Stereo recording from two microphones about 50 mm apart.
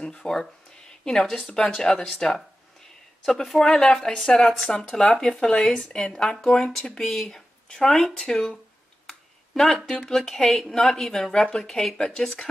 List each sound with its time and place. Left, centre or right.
0.0 s a woman's voice: centre
0.7 s a sound: centre
1.4 s a woman's voice: centre
3.4 s a woman's voice: centre